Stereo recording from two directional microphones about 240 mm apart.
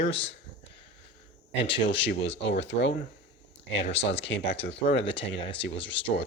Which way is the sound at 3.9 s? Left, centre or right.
Left.